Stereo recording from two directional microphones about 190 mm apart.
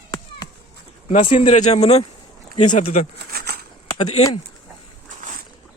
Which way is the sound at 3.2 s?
55° right (ahead or behind).